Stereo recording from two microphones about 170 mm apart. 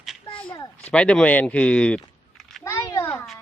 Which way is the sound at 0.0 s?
Centre (ahead or behind).